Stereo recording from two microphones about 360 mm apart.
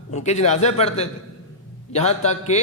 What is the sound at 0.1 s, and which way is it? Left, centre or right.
A man's voice, centre.